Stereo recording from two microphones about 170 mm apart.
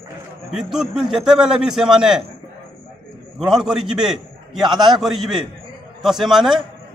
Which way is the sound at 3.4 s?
Centre (ahead or behind).